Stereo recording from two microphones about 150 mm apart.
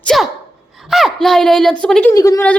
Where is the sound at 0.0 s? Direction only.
5° left (ahead or behind).